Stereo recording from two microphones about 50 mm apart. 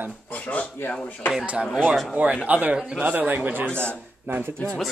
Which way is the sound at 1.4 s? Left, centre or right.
Right.